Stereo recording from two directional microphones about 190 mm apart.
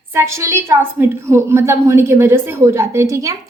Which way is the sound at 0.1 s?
15° right (ahead or behind).